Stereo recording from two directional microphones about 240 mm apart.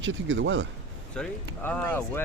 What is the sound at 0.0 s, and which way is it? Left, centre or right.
Speech, right.